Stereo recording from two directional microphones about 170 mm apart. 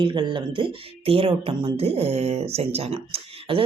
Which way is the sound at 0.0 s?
30° right (ahead or behind).